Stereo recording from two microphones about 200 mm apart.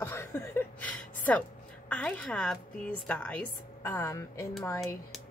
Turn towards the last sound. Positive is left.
turn(degrees=15)  # may be behind; listen again after turning